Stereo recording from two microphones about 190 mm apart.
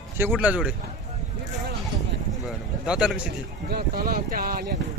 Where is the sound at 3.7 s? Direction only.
55° right (ahead or behind).